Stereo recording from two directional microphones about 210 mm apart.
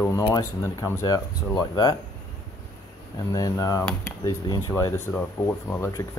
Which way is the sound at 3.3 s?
15° left (ahead or behind).